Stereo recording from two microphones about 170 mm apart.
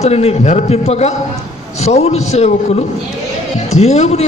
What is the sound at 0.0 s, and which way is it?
A man's voice, 35° left (ahead or behind).